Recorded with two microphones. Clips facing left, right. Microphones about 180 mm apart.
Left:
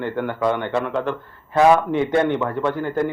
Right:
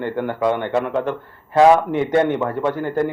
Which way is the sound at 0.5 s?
10° right (ahead or behind).